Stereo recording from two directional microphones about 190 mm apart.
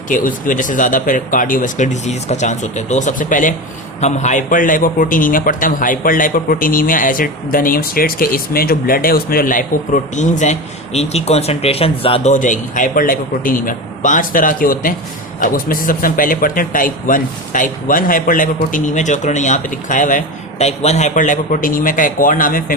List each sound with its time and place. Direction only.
0.1 s speech: 45° left (ahead or behind)